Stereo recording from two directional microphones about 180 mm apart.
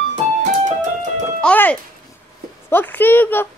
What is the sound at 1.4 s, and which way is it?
Music, 10° left (ahead or behind).